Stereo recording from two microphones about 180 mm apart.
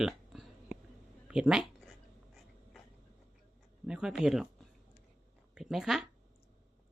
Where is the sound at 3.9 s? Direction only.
5° right (ahead or behind).